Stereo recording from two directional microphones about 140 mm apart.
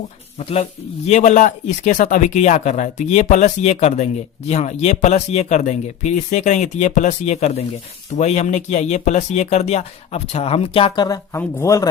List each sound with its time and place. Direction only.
0.3 s a man's voice: 50° left (ahead or behind); by 11.9 s 20° left (ahead or behind)